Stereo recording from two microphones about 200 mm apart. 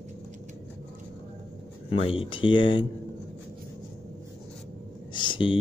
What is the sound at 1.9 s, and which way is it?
Speech, 25° left (ahead or behind).